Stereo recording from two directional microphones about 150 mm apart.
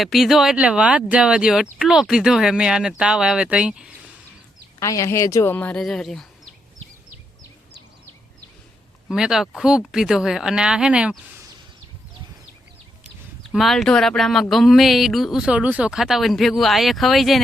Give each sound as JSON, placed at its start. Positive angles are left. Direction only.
{"t": 0.0, "sound": "speech", "side_deg": 0}
{"t": 4.8, "sound": "speech", "side_deg": 20}
{"t": 5.8, "sound": "speech", "side_deg": 0}
{"t": 9.0, "sound": "speech", "side_deg": -5}
{"t": 13.4, "sound": "speech", "side_deg": 0}